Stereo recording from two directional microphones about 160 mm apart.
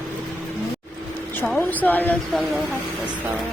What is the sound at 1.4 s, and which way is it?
A woman's voice, 10° left (ahead or behind).